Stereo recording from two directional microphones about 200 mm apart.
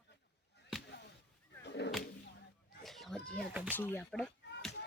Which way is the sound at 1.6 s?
60° left (ahead or behind).